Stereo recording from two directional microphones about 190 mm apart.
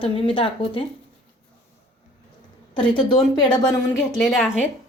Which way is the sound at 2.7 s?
25° left (ahead or behind).